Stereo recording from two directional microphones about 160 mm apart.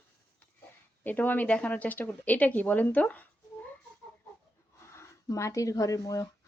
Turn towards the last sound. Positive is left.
turn(degrees=20)  # may be behind; listen again after turning